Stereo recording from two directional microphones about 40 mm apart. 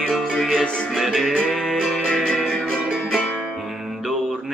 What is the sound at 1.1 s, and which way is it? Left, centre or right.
Music, centre.